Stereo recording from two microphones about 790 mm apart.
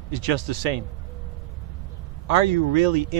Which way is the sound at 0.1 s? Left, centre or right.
Right.